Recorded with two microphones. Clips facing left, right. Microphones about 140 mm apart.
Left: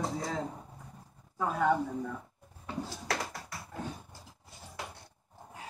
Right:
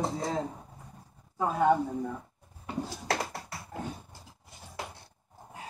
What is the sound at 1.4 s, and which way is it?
Speech, 25° right (ahead or behind).